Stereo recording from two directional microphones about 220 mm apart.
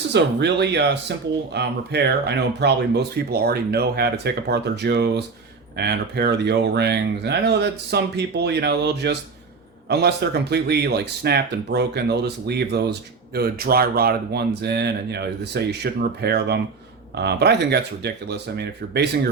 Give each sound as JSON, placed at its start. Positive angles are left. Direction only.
{"t": 0.1, "sound": "speech", "side_deg": -50}